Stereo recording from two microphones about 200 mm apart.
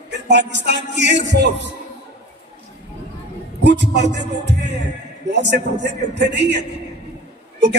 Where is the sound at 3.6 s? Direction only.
60° right (ahead or behind).